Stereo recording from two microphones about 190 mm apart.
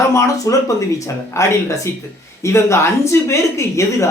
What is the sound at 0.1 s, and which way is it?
Speech, 15° left (ahead or behind).